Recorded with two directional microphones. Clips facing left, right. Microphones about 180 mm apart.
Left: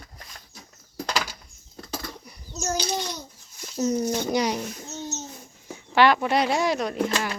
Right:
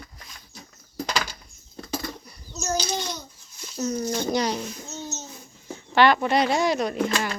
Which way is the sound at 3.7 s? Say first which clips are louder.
Left 3 dB; 20° left (ahead or behind).